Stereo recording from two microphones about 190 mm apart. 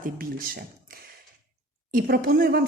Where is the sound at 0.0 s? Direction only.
50° right (ahead or behind).